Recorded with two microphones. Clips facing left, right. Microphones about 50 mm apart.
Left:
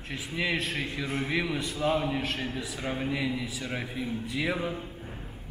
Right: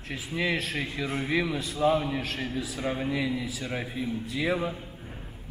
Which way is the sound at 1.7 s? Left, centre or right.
Centre.